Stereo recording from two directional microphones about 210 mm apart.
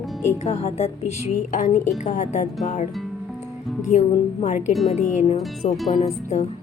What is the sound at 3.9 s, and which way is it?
Speech, 35° left (ahead or behind).